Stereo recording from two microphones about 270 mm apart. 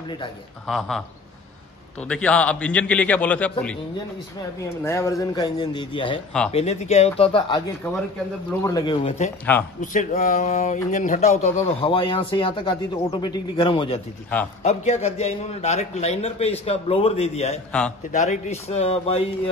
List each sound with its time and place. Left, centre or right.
0.7 s a man's voice: centre; by 19.5 s left